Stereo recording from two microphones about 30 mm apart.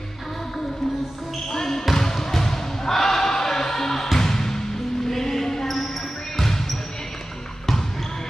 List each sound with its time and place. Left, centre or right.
1.5 s basketball bounce: centre
2.0 s music: centre
6.3 s basketball bounce: centre